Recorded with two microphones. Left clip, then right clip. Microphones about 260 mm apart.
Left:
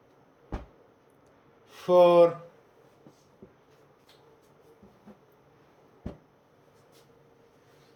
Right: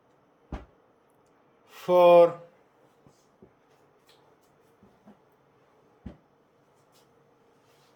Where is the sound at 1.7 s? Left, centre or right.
Centre.